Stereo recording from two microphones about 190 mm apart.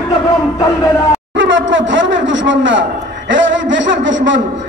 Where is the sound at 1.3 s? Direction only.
75° right (ahead or behind).